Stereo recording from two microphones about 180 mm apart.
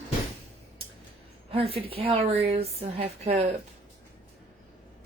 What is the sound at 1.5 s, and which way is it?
A woman's voice, 30° right (ahead or behind).